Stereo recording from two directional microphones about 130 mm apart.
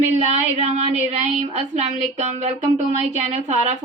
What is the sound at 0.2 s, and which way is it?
Speech, 60° right (ahead or behind).